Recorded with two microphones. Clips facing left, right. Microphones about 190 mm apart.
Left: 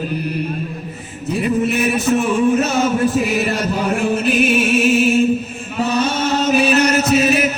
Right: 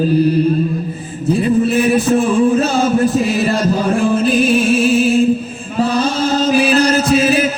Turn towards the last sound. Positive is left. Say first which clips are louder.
# right 2 dB
turn(degrees=-30)  # may be behind; listen again after turning